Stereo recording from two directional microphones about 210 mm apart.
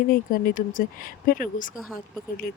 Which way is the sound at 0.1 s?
40° left (ahead or behind).